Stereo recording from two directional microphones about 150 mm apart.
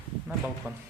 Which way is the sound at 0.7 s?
10° right (ahead or behind).